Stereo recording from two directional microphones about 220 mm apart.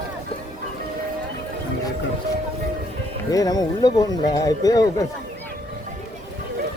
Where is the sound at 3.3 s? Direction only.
15° left (ahead or behind).